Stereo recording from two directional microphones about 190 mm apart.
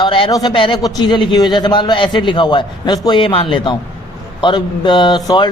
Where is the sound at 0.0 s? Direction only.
25° left (ahead or behind).